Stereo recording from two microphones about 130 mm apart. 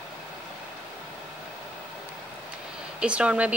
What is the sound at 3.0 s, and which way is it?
Speech, 10° right (ahead or behind).